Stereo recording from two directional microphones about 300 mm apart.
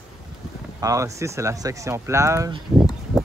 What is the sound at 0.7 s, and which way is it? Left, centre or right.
Speech, centre.